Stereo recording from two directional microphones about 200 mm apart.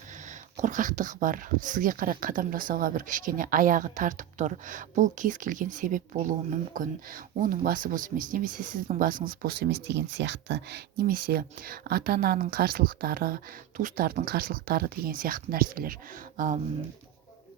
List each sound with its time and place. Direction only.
0.6 s speech: 40° right (ahead or behind)